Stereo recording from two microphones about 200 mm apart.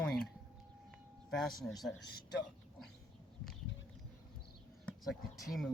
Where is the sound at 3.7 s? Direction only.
65° left (ahead or behind).